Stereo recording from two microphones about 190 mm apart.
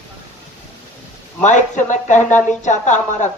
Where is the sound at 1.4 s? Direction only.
40° left (ahead or behind).